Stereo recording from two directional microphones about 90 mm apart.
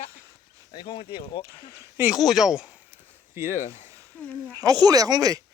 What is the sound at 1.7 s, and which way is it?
Speech, 30° right (ahead or behind).